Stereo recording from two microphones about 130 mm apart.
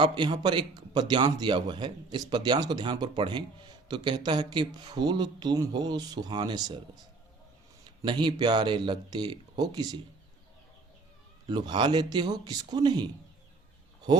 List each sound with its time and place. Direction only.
0.0 s speech: 35° right (ahead or behind)
8.0 s speech: 35° right (ahead or behind)
11.4 s speech: 35° right (ahead or behind)